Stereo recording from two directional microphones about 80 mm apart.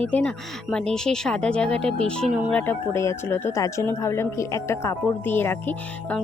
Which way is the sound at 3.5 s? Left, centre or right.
Left.